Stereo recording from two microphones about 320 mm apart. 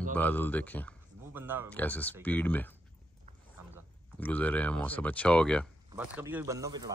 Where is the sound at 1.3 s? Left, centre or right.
Centre.